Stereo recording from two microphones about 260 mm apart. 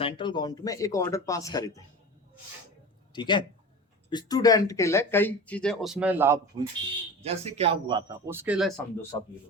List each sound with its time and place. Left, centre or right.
0.0 s speech: centre
3.1 s speech: centre
7.2 s a man's voice: right; by 9.0 s centre